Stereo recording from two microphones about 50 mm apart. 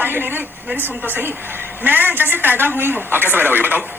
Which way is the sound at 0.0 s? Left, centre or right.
Right.